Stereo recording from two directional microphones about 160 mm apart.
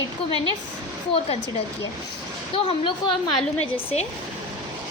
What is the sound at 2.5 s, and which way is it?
Speech, 30° left (ahead or behind).